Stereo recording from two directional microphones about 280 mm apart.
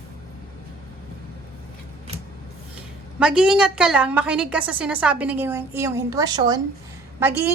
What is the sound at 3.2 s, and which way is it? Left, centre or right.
A woman's voice, centre.